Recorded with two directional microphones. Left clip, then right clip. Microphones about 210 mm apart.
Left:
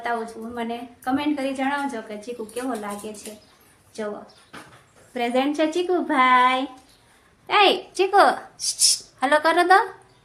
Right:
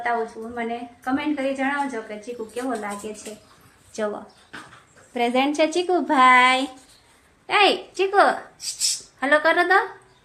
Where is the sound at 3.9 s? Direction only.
45° right (ahead or behind).